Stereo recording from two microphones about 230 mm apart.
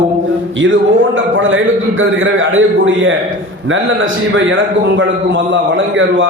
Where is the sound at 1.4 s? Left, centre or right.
Right.